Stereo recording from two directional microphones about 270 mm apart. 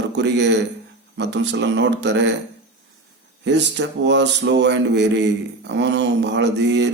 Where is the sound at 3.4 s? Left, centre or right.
Right.